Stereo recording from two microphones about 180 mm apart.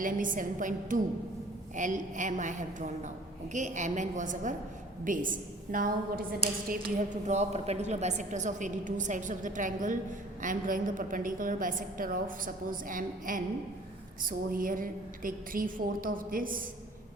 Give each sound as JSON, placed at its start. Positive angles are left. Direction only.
{"t": 0.0, "sound": "a woman's voice", "side_deg": -50}
{"t": 7.3, "sound": "a woman's voice", "side_deg": -35}